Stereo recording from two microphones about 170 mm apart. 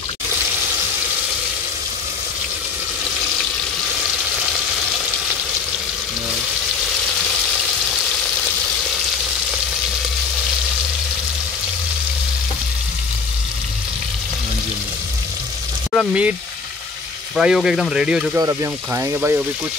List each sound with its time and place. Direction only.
15.9 s speech: 5° right (ahead or behind)
17.4 s speech: 5° right (ahead or behind)
18.3 s speech: 20° right (ahead or behind)